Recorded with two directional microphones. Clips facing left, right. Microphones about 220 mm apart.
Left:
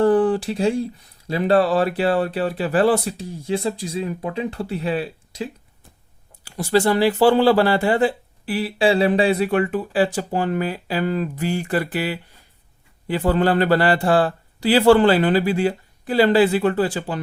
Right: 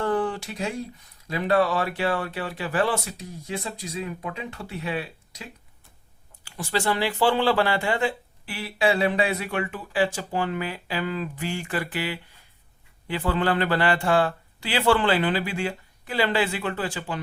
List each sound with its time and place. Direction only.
0.0 s speech: 35° left (ahead or behind)